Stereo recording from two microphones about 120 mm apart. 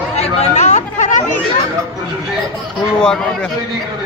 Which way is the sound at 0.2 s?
60° left (ahead or behind).